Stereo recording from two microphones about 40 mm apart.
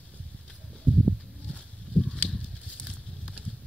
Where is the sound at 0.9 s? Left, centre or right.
Left.